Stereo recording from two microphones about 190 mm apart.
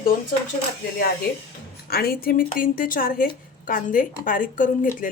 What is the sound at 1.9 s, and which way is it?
A woman's voice, 55° left (ahead or behind).